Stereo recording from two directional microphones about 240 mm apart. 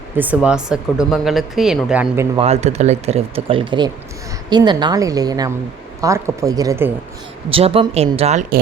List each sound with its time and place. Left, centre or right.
0.2 s speech: centre
2.4 s a woman's voice: right; by 6.9 s centre
7.5 s speech: right